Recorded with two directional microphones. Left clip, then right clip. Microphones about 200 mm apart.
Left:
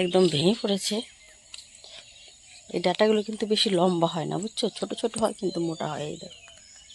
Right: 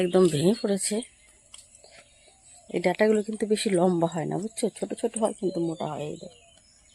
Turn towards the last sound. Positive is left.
turn(degrees=-5)  # may be behind; listen again after turning